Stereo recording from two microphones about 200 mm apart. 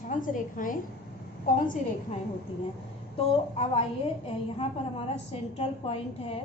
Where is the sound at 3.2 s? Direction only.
30° left (ahead or behind).